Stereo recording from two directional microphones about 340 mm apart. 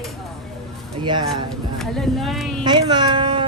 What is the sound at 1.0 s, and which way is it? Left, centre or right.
Speech, centre.